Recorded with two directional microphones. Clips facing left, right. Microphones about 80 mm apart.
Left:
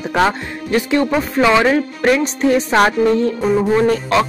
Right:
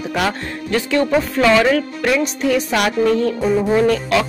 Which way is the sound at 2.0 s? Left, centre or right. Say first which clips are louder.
Left 4 dB; left.